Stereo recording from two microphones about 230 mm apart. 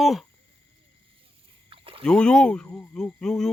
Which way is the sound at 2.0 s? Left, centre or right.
Centre.